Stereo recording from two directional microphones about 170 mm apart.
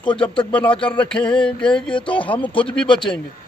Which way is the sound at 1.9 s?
30° left (ahead or behind).